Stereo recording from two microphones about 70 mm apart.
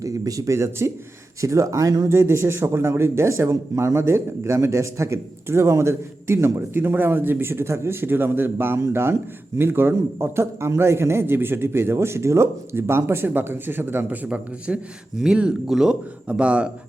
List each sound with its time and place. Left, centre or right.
0.0 s speech: right
2.0 s speech: right
14.3 s speech: centre